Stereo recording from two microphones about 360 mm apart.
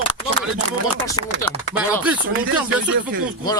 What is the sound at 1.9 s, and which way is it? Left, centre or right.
Speech, centre.